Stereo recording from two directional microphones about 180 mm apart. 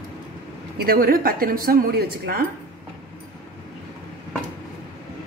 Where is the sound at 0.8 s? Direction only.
55° right (ahead or behind).